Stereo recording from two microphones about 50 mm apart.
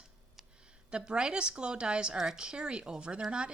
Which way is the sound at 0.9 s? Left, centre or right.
Centre.